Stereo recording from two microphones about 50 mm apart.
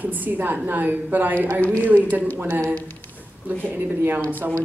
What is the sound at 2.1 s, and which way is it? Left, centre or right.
Speech, right.